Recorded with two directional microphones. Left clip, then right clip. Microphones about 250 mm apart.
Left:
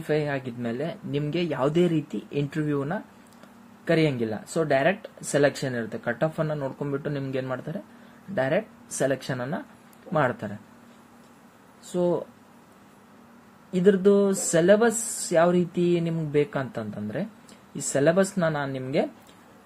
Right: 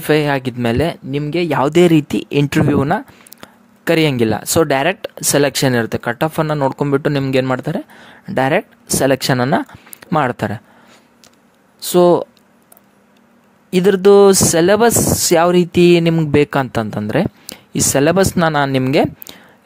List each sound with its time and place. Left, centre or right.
0.0 s speech: right
11.9 s speech: right
13.7 s speech: right